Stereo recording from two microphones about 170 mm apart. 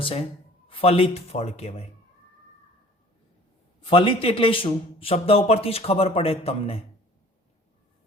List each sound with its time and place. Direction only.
0.7 s a man's voice: 35° left (ahead or behind)
3.8 s a man's voice: 30° left (ahead or behind)